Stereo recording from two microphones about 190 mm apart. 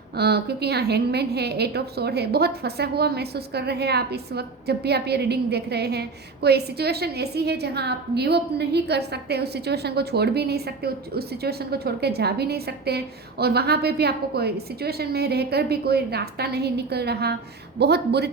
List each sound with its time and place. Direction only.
0.2 s a woman's voice: 60° right (ahead or behind)